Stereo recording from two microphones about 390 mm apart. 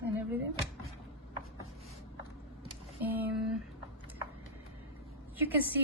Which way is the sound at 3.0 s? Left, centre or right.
Centre.